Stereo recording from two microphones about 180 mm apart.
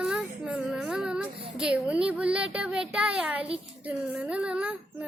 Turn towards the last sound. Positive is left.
turn(degrees=-5)  # may be behind; listen again after turning